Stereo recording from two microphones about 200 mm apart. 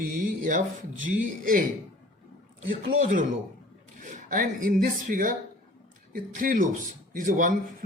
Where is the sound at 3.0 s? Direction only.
40° right (ahead or behind).